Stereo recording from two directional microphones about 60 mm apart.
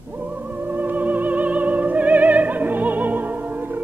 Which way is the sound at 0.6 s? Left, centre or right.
Right.